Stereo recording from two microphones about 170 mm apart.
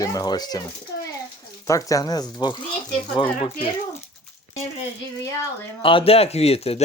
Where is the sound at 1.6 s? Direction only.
20° left (ahead or behind).